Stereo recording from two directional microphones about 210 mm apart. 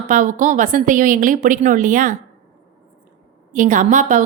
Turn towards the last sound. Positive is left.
turn(degrees=-40)  # may be behind; listen again after turning